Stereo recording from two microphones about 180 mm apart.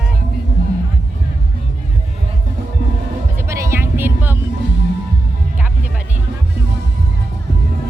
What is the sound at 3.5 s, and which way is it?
Music, 15° right (ahead or behind).